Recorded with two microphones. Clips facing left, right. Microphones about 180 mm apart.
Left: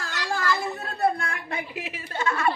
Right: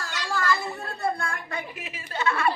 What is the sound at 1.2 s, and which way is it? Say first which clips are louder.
Speech: even; 65° left (ahead or behind).